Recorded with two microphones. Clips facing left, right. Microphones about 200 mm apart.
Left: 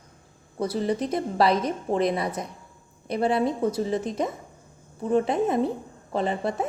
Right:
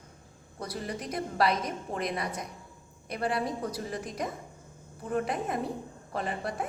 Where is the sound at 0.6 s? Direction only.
30° left (ahead or behind).